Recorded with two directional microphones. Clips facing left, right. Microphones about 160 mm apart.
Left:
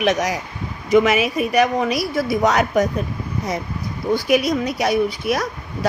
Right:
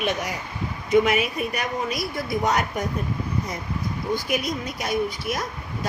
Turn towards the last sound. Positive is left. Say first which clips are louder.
# left 6 dB
turn(degrees=75)  # may be behind; listen again after turning